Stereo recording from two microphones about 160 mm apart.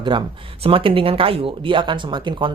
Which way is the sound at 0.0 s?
30° right (ahead or behind).